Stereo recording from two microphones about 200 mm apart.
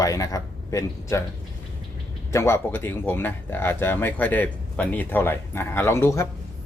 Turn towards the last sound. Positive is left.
turn(degrees=15)  # may be behind; listen again after turning